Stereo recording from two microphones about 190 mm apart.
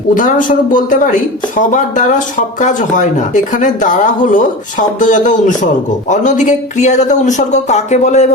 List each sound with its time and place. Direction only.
0.1 s speech: 45° left (ahead or behind)